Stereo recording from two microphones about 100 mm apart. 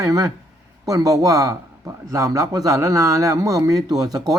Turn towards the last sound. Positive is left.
turn(degrees=-35)  # may be behind; listen again after turning